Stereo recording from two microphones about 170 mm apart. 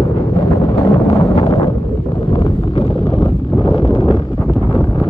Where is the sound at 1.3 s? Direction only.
35° left (ahead or behind).